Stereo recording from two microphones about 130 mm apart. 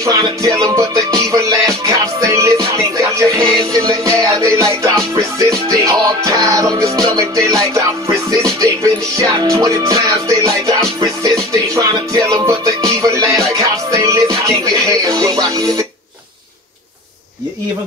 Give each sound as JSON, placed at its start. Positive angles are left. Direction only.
{"t": 0.0, "sound": "music", "side_deg": -25}